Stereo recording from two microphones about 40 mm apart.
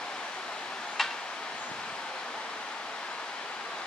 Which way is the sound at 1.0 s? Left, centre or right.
Centre.